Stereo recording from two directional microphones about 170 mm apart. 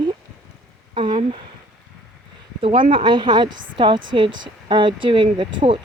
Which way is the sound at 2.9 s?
30° right (ahead or behind).